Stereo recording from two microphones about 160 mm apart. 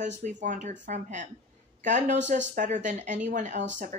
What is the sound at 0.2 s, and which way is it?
Speech, 50° right (ahead or behind).